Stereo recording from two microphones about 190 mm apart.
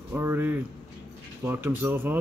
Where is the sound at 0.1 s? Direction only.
15° right (ahead or behind).